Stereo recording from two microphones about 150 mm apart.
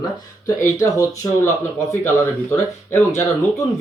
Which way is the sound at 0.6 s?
20° left (ahead or behind).